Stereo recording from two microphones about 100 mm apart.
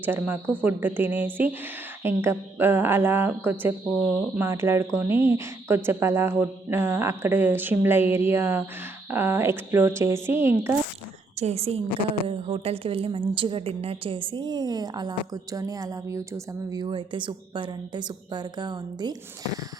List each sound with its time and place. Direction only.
0.0 s speech: 20° right (ahead or behind)
11.3 s a woman's voice: 90° right
11.9 s a woman's voice: 65° left (ahead or behind)
12.3 s a woman's voice: 70° right (ahead or behind); by 16.4 s 30° right (ahead or behind)
16.7 s a woman's voice: 55° right (ahead or behind)